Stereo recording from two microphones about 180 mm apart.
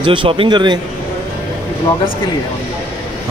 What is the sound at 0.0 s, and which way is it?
Speech, 25° right (ahead or behind).